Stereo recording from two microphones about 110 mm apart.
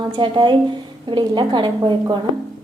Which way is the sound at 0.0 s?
45° right (ahead or behind).